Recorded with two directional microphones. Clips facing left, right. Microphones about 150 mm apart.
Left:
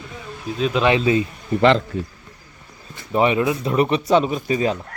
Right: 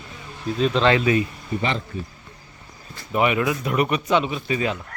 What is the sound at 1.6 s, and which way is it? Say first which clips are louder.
Speech: left 10 dB; 85° left.